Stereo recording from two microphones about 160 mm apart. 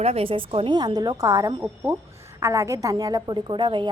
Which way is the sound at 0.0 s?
40° right (ahead or behind).